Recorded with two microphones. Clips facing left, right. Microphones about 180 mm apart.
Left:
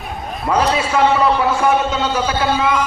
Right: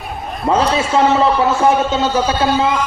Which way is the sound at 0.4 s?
25° right (ahead or behind).